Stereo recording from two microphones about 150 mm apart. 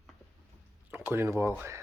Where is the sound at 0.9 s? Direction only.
15° right (ahead or behind).